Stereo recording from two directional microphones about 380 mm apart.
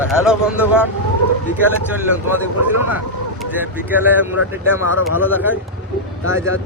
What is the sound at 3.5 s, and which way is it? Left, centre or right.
Speech, centre.